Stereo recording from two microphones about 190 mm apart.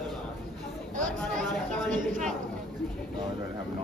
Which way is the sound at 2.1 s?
45° right (ahead or behind).